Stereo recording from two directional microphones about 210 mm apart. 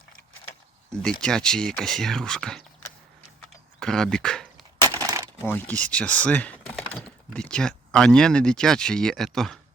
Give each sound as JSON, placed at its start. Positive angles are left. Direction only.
{"t": 1.2, "sound": "speech", "side_deg": 5}
{"t": 3.8, "sound": "speech", "side_deg": 5}
{"t": 4.8, "sound": "crushing", "side_deg": -15}
{"t": 5.5, "sound": "speech", "side_deg": 10}